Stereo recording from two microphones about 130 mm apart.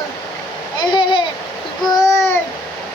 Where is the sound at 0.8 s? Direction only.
40° left (ahead or behind).